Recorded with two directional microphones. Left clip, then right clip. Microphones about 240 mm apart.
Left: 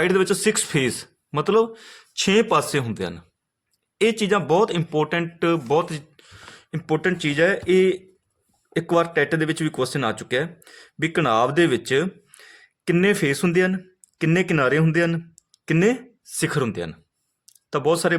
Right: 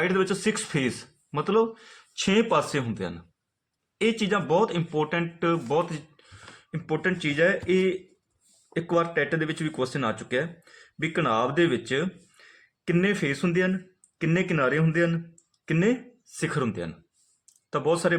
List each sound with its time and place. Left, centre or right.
0.0 s speech: left